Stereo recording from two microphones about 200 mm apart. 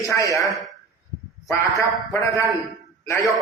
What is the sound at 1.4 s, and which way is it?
A man's voice, 15° left (ahead or behind).